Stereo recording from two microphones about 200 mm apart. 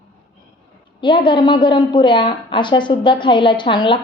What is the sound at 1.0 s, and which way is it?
A woman's voice, 25° left (ahead or behind).